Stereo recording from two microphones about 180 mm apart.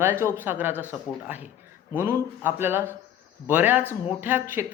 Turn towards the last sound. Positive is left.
turn(degrees=-10)  # may be behind; listen again after turning